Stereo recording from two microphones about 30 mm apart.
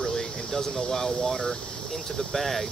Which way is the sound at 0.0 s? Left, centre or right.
Centre.